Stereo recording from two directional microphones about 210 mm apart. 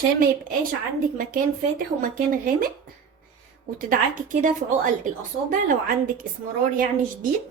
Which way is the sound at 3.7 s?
40° right (ahead or behind).